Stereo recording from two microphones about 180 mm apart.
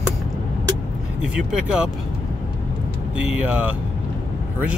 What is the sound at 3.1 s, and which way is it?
Speech, 5° right (ahead or behind).